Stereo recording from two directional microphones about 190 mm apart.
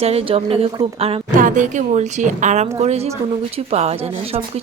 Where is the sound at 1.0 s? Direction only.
30° right (ahead or behind).